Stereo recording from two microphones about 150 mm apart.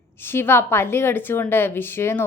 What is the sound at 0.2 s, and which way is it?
A woman's voice, 15° left (ahead or behind).